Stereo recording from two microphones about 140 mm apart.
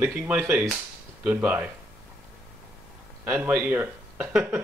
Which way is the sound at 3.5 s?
10° right (ahead or behind).